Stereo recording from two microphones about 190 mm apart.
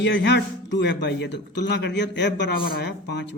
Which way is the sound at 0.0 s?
65° left (ahead or behind).